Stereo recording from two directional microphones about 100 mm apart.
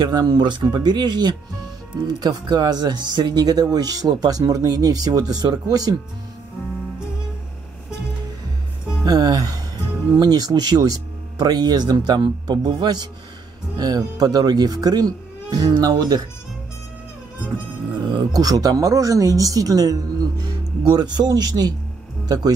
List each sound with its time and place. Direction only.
0.0 s speech: 45° right (ahead or behind)
9.0 s speech: 40° right (ahead or behind)
18.1 s speech: 40° right (ahead or behind)